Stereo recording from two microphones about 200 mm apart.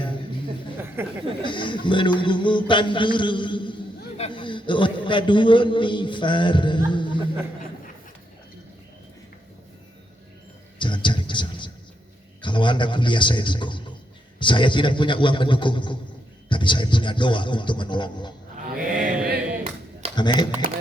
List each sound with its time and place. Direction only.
1.0 s speech: 10° right (ahead or behind)
1.4 s a man's voice: 25° left (ahead or behind)
10.8 s a sound: 25° left (ahead or behind)
12.4 s a man's voice: 25° left (ahead or behind)
18.5 s chant: 45° right (ahead or behind)
20.1 s a man's voice: 20° left (ahead or behind)